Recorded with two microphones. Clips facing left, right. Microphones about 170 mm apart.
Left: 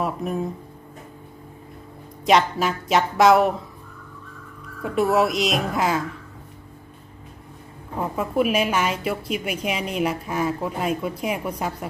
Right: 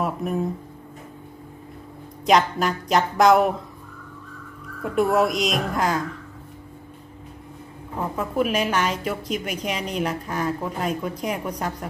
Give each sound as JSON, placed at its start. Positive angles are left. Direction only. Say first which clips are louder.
{"t": 0.0, "sound": "music", "louder": "even", "side_deg": 0}
{"t": 2.2, "sound": "speech", "louder": "even", "side_deg": 0}
{"t": 4.8, "sound": "speech", "louder": "even", "side_deg": 0}
{"t": 8.2, "sound": "a woman's voice", "louder": "left 2 dB", "side_deg": 10}